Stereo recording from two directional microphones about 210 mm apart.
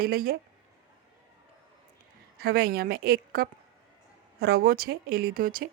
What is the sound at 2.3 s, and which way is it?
Speech, 45° right (ahead or behind).